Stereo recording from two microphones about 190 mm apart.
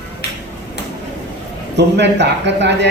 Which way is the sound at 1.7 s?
65° right (ahead or behind).